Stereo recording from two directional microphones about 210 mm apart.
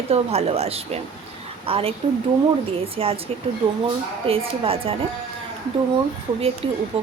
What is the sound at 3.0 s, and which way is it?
Speech, 25° right (ahead or behind).